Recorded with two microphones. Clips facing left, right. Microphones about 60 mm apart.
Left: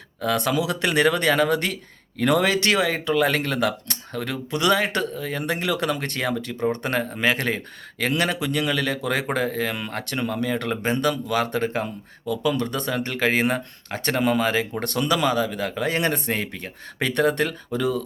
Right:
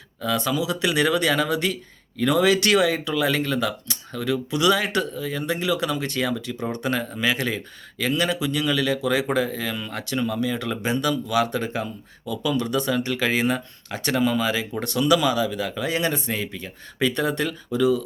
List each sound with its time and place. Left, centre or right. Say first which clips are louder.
0.2 s speech: left 1 dB; left
2.5 s speech: right 2 dB; left
6.6 s speech: left 4 dB; left